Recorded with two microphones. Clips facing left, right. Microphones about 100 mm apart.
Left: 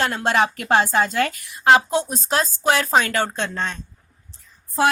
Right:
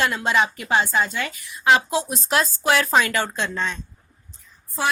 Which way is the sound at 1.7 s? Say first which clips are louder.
Left 3 dB; 35° left (ahead or behind).